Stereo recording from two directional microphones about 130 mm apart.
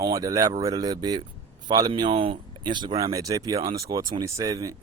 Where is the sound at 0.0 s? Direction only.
25° right (ahead or behind).